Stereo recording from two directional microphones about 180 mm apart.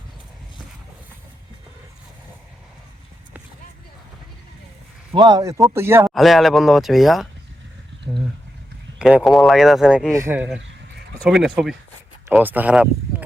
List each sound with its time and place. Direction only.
5.1 s a man's voice: 25° right (ahead or behind)
6.1 s speech: centre (ahead or behind)
9.0 s speech: 5° right (ahead or behind)
10.1 s speech: 15° right (ahead or behind)